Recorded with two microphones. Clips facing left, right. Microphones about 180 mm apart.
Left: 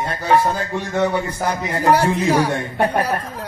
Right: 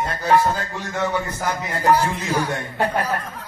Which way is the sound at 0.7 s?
15° left (ahead or behind).